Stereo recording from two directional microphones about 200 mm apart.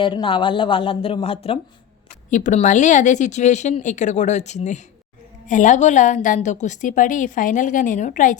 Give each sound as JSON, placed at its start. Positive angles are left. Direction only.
{"t": 0.0, "sound": "a woman's voice", "side_deg": 25}